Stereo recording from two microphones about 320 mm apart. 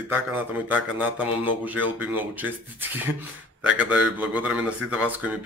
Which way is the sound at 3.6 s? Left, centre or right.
Centre.